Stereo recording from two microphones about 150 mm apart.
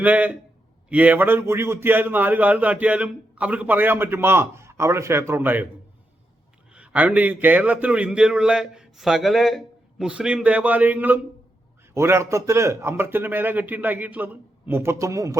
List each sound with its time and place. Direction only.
0.0 s a man's voice: 10° right (ahead or behind)
6.7 s a man's voice: 10° right (ahead or behind)